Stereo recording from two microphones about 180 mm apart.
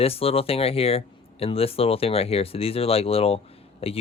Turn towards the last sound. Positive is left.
turn(degrees=35)  # may be behind; listen again after turning